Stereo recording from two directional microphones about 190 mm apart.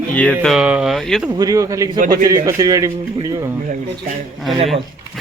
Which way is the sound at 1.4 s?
20° right (ahead or behind).